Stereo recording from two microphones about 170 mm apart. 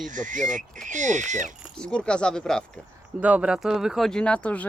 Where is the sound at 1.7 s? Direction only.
5° left (ahead or behind).